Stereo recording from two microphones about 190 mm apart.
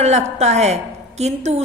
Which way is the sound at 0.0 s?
35° right (ahead or behind).